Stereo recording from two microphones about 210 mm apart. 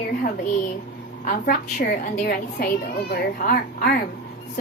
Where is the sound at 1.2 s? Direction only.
40° left (ahead or behind).